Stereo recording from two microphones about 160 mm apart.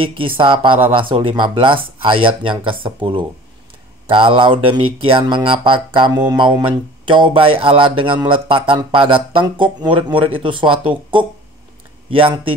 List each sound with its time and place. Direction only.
0.4 s speech: 30° right (ahead or behind)